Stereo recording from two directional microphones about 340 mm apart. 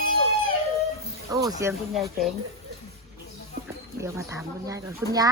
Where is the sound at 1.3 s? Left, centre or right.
Centre.